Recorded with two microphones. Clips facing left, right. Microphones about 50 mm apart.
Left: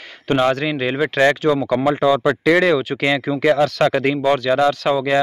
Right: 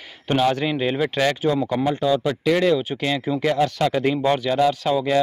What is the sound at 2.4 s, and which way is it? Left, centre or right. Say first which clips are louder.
Speech: left 2 dB; left.